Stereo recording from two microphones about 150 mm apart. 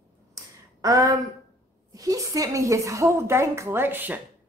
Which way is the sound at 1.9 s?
25° right (ahead or behind).